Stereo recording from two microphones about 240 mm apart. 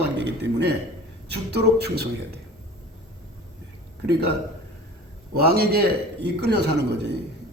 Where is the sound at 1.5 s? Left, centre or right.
Right.